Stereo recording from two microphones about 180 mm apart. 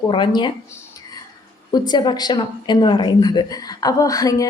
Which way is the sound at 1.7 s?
25° left (ahead or behind).